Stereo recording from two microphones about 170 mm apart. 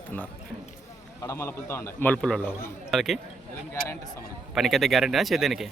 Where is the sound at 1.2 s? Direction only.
15° left (ahead or behind); by 3.2 s centre (ahead or behind).